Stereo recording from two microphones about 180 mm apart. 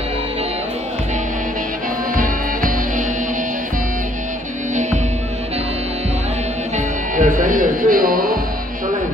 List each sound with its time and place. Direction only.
2.1 s music: 50° right (ahead or behind)
7.2 s music: 45° right (ahead or behind)